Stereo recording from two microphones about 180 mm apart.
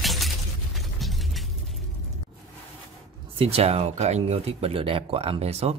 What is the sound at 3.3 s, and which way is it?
Speech, 35° right (ahead or behind).